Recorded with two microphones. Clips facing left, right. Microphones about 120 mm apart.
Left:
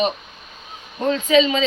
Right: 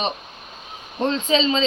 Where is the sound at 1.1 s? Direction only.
30° right (ahead or behind).